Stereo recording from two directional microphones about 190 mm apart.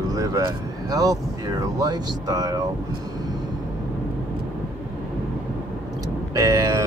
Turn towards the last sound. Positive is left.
turn(degrees=-15)  # may be behind; listen again after turning